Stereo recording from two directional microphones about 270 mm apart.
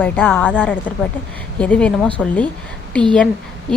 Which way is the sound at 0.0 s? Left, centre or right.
Centre.